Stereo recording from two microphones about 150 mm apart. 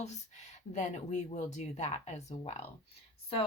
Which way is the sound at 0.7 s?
50° left (ahead or behind).